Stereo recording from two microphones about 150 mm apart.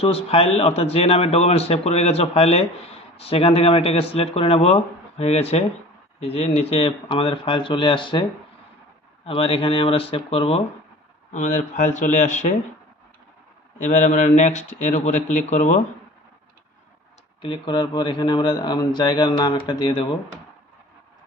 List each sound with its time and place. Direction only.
0.0 s a man's voice: 40° left (ahead or behind)
9.2 s speech: 40° left (ahead or behind)
11.3 s a man's voice: 55° left (ahead or behind)
13.8 s a man's voice: 55° left (ahead or behind)
17.4 s speech: 30° left (ahead or behind)